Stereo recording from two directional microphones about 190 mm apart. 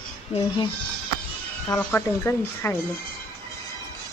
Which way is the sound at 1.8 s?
10° left (ahead or behind).